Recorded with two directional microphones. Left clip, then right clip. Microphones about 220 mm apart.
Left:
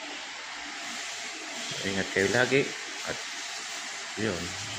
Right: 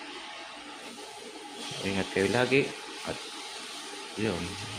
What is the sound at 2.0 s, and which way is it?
Speech, 20° right (ahead or behind).